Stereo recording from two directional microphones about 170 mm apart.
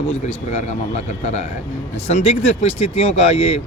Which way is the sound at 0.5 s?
40° left (ahead or behind).